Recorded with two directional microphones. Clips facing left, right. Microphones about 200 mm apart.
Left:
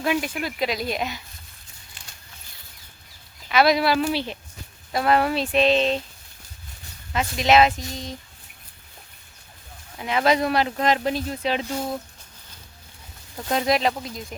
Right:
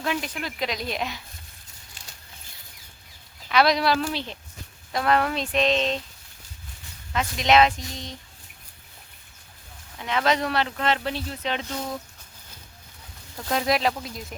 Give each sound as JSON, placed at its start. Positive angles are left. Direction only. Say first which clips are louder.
{"t": 0.0, "sound": "speech", "louder": "left 4 dB", "side_deg": 10}
{"t": 2.0, "sound": "a sound", "louder": "right 1 dB", "side_deg": -40}
{"t": 3.5, "sound": "speech", "louder": "left 2 dB", "side_deg": 5}
{"t": 7.1, "sound": "speech", "louder": "left 2 dB", "side_deg": 5}
{"t": 10.0, "sound": "speech", "louder": "left 3 dB", "side_deg": 10}
{"t": 13.5, "sound": "speech", "louder": "left 2 dB", "side_deg": 0}